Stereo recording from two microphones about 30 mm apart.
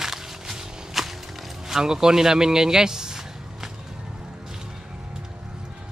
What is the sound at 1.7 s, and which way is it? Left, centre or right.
Speech, centre.